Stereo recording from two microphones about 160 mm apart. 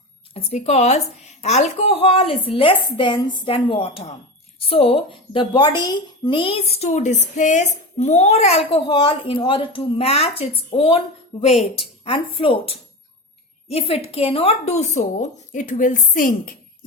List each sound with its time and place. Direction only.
0.3 s a woman's voice: 45° left (ahead or behind)